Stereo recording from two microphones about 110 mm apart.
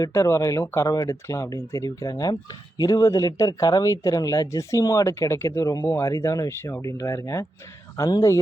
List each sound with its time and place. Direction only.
0.0 s speech: 30° left (ahead or behind)